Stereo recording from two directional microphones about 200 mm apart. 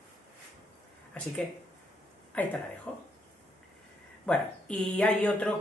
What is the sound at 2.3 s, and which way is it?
Speech, 5° left (ahead or behind).